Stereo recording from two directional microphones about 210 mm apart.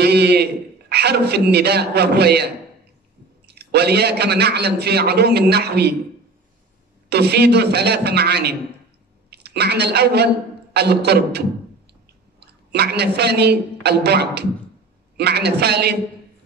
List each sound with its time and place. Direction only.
0.0 s a man's voice: 50° right (ahead or behind)
7.1 s a man's voice: 50° right (ahead or behind)